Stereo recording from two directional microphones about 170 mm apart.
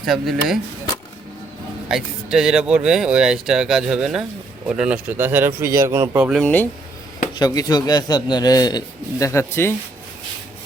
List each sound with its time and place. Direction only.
0.0 s speech: centre (ahead or behind)
1.9 s speech: 5° right (ahead or behind)
6.4 s speech: 10° left (ahead or behind)
7.3 s a man's voice: 25° left (ahead or behind)